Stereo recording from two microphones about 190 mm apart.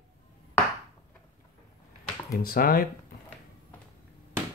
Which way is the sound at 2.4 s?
50° left (ahead or behind).